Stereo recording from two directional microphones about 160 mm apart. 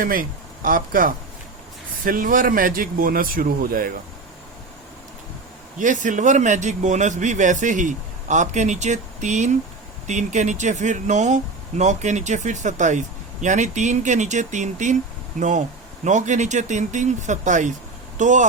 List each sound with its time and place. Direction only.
0.0 s speech: 60° right (ahead or behind)
5.8 s speech: 55° right (ahead or behind)